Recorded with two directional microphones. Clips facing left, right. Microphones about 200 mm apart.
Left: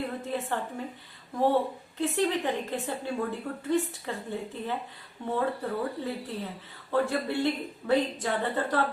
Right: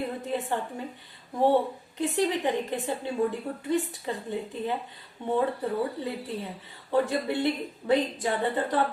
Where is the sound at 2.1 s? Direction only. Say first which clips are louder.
Right 2 dB; 15° right (ahead or behind).